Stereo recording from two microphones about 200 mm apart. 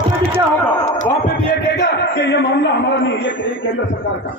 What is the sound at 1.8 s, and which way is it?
A man's voice, 60° left (ahead or behind).